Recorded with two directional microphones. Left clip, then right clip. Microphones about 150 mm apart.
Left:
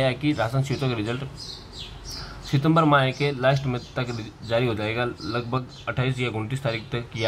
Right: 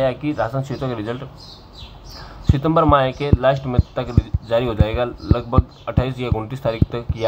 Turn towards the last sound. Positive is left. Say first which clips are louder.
# right 6 dB
turn(degrees=5)  # may be behind; listen again after turning